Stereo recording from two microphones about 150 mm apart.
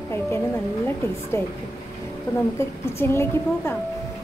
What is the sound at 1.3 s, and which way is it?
Speech, 15° left (ahead or behind).